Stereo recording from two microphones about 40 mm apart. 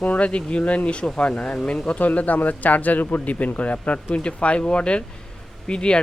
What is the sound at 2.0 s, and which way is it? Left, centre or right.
Speech, left.